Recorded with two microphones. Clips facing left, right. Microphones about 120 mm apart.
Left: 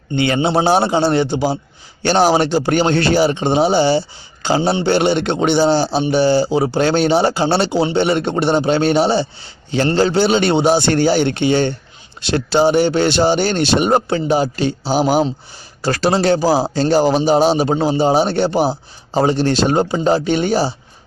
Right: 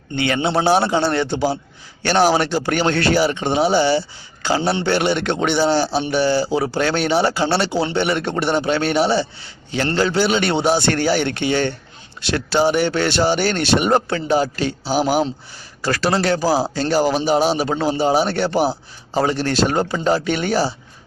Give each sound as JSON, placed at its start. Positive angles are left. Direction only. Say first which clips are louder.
{"t": 0.2, "sound": "a man's voice", "louder": "left 3 dB", "side_deg": 25}